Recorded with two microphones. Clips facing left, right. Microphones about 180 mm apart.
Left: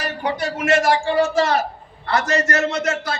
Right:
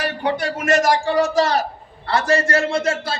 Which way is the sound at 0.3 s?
50° right (ahead or behind).